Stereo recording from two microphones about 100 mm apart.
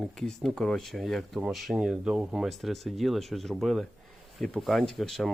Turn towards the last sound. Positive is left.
turn(degrees=5)  # may be behind; listen again after turning